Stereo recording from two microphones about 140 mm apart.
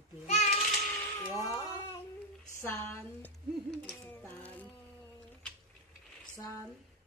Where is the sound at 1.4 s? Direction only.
25° left (ahead or behind).